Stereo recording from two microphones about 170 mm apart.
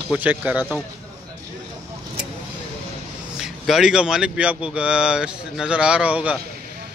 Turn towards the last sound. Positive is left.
turn(degrees=-10)  # may be behind; listen again after turning